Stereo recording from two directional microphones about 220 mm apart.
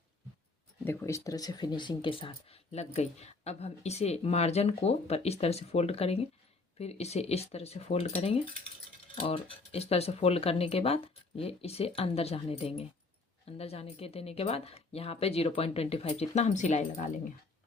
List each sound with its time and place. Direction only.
0.9 s speech: 15° left (ahead or behind); by 17.1 s 30° left (ahead or behind)